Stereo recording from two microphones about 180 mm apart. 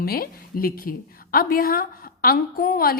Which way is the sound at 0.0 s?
55° left (ahead or behind).